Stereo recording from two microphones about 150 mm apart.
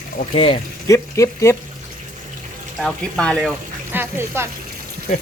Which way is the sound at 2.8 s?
5° left (ahead or behind).